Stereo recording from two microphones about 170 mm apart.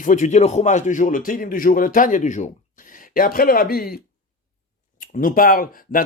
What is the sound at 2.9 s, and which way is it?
Speech, 55° left (ahead or behind).